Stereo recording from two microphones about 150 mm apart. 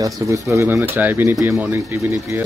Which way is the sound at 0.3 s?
20° right (ahead or behind).